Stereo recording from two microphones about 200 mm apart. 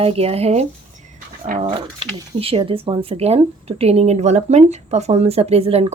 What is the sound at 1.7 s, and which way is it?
Speech, 25° right (ahead or behind).